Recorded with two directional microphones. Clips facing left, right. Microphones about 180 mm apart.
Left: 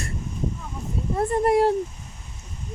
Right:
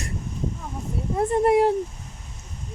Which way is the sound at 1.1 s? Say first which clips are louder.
Right 1 dB; 15° right (ahead or behind).